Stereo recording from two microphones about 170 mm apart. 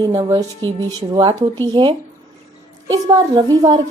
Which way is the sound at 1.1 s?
25° right (ahead or behind).